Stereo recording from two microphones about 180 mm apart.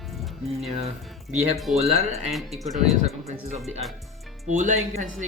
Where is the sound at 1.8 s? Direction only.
35° right (ahead or behind).